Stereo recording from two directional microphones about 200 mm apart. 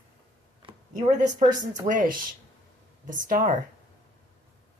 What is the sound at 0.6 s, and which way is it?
Speech, 30° right (ahead or behind).